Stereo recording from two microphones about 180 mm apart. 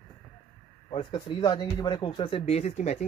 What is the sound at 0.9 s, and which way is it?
Speech, 30° left (ahead or behind).